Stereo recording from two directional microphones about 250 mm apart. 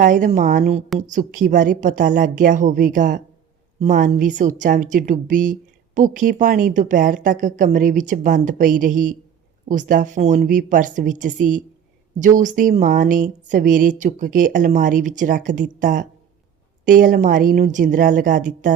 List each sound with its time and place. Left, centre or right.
0.0 s a woman's voice: right